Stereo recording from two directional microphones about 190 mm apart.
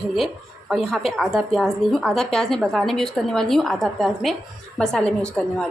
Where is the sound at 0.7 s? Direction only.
Centre (ahead or behind).